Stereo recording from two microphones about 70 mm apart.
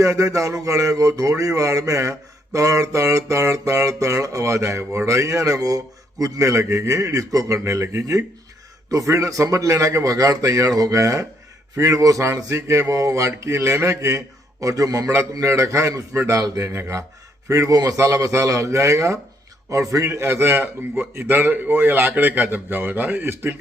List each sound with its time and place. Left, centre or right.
0.0 s speech: right
6.4 s speech: right
17.7 s a man's voice: right
17.9 s a man's voice: right